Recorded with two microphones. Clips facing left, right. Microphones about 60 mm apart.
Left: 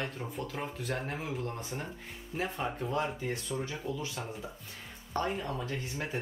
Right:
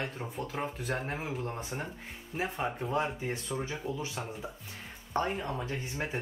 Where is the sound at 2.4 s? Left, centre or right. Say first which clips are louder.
Right 1 dB; centre.